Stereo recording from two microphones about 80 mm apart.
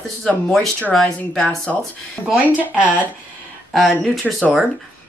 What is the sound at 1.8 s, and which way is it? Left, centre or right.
Speech, centre.